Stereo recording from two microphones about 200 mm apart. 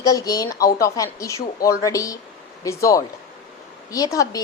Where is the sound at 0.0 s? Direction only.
15° left (ahead or behind).